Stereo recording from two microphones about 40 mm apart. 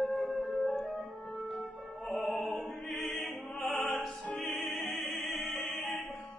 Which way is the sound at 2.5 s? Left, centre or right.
Centre.